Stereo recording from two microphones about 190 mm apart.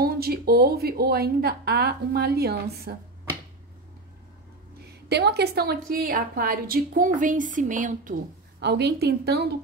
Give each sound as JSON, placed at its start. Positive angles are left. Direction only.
{"t": 0.0, "sound": "a woman's voice", "side_deg": -55}
{"t": 5.0, "sound": "a woman's voice", "side_deg": -60}
{"t": 8.5, "sound": "a woman's voice", "side_deg": -60}